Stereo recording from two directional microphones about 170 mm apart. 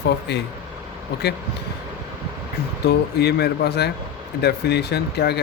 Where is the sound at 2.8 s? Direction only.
70° left (ahead or behind).